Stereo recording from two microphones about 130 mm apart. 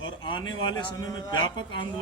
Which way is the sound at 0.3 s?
40° left (ahead or behind).